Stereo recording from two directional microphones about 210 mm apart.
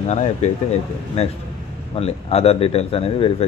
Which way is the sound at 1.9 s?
30° left (ahead or behind).